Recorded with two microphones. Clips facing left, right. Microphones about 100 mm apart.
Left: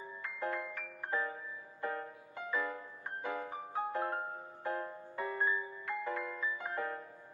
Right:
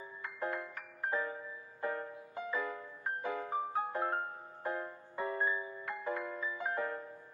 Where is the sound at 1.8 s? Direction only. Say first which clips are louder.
Right 2 dB; 25° right (ahead or behind).